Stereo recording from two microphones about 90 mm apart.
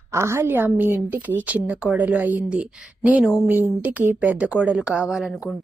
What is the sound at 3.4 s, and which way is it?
A woman's voice, 20° right (ahead or behind).